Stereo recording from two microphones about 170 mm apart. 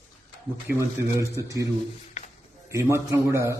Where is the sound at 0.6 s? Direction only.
15° right (ahead or behind).